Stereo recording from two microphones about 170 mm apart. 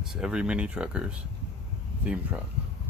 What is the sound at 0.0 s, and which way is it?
Speech, 5° right (ahead or behind).